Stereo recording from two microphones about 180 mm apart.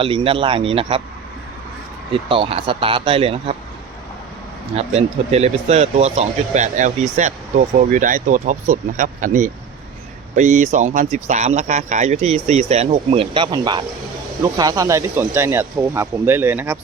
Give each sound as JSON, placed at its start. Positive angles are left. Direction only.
{"t": 0.0, "sound": "speech", "side_deg": -30}
{"t": 2.3, "sound": "speech", "side_deg": -30}
{"t": 4.8, "sound": "speech", "side_deg": -35}